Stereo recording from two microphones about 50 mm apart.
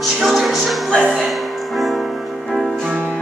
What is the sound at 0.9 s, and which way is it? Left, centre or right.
Music, centre.